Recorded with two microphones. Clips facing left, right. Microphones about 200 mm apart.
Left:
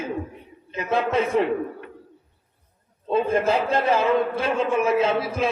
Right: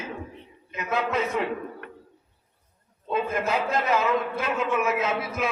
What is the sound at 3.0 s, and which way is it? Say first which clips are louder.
A man's voice: left 6 dB; 30° left (ahead or behind).